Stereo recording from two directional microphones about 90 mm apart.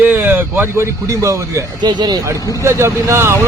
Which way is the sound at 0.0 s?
20° right (ahead or behind).